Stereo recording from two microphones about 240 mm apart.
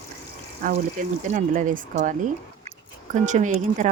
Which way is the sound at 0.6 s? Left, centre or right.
Right.